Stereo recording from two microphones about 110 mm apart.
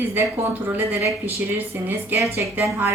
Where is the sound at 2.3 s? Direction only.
25° right (ahead or behind).